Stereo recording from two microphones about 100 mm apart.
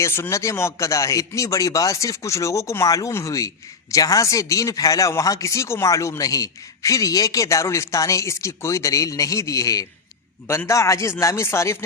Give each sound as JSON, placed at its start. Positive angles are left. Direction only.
{"t": 0.0, "sound": "a man's voice", "side_deg": 25}